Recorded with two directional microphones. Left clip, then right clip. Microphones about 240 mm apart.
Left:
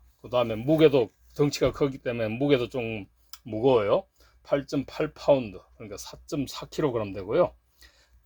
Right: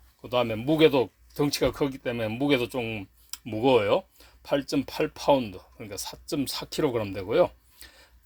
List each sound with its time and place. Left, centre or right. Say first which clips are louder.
0.2 s speech: even; centre